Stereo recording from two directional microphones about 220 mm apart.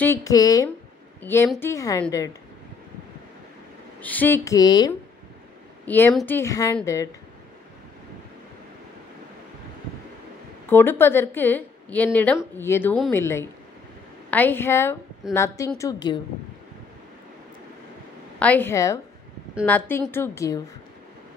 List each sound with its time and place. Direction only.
0.0 s a woman's voice: 15° left (ahead or behind)
4.0 s a woman's voice: 5° left (ahead or behind)
10.7 s a woman's voice: 10° left (ahead or behind)
18.4 s a woman's voice: 10° left (ahead or behind)